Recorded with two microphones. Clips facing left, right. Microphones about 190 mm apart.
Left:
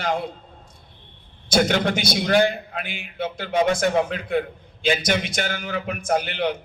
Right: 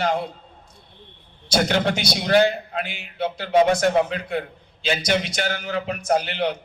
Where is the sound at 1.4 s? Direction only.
50° left (ahead or behind).